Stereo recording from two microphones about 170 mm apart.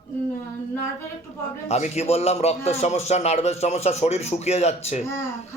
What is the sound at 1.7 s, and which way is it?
A man's voice, 40° left (ahead or behind).